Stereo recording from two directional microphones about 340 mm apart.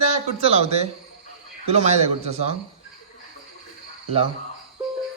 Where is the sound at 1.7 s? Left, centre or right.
Centre.